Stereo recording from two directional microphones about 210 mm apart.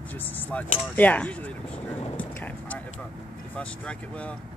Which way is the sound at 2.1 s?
10° left (ahead or behind).